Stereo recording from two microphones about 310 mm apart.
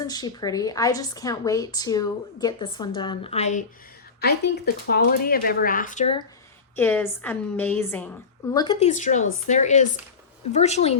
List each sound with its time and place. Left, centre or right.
0.0 s a woman's voice: centre
6.7 s a woman's voice: centre
8.5 s speech: centre